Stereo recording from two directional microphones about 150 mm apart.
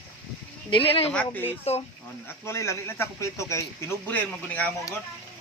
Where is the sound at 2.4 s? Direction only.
20° left (ahead or behind).